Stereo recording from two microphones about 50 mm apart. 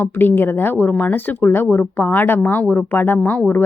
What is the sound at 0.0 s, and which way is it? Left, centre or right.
Speech, left.